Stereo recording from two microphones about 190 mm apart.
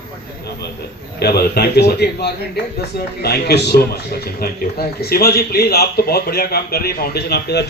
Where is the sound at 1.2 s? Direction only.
55° left (ahead or behind).